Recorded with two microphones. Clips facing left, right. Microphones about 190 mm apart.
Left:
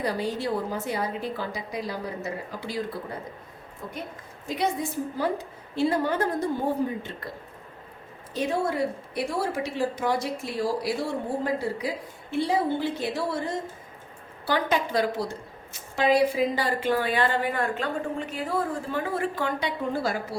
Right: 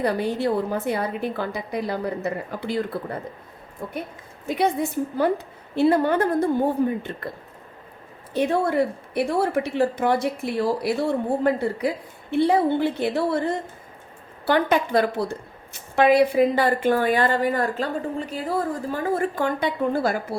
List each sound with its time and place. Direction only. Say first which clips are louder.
0.0 s a woman's voice: right 5 dB; 60° right (ahead or behind)
4.4 s a woman's voice: right 5 dB; 60° right (ahead or behind)
8.3 s a woman's voice: right 5 dB; 60° right (ahead or behind)